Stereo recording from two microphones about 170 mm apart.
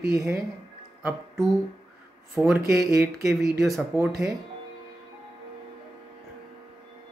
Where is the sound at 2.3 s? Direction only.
15° right (ahead or behind).